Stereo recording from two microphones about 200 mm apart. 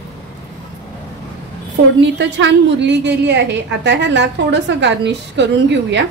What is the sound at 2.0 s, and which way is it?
A woman's voice, 65° right (ahead or behind).